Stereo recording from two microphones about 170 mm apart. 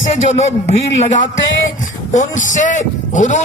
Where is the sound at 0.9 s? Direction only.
50° left (ahead or behind).